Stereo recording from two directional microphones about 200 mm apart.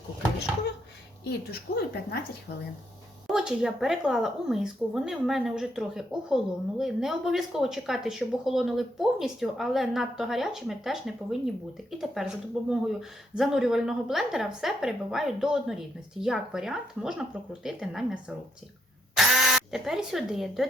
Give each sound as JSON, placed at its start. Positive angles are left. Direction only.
{"t": 1.2, "sound": "a woman's voice", "side_deg": 50}
{"t": 3.2, "sound": "speech", "side_deg": -5}